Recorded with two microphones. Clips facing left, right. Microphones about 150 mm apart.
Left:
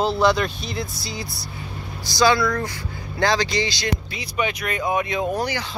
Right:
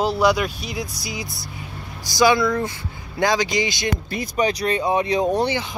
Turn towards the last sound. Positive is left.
turn(degrees=-25)  # may be behind; listen again after turning